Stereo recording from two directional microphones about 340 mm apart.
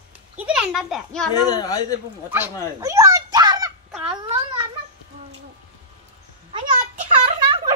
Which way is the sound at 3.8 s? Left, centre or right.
Centre.